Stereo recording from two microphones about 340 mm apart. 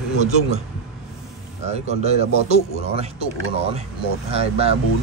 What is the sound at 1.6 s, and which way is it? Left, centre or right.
Speech, centre.